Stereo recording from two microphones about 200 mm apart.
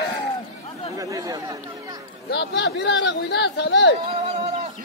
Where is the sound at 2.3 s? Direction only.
60° left (ahead or behind).